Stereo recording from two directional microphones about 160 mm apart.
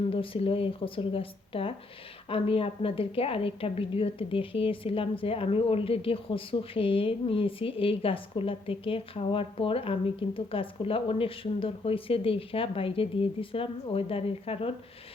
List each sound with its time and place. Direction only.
0.1 s a woman's voice: 35° left (ahead or behind)